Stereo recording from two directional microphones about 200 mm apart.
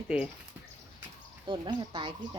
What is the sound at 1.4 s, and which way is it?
Speech, 25° right (ahead or behind).